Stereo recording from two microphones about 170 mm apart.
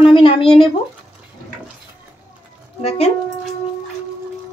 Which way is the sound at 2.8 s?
35° left (ahead or behind).